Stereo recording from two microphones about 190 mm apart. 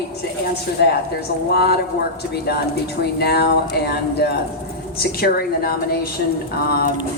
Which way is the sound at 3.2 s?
60° left (ahead or behind).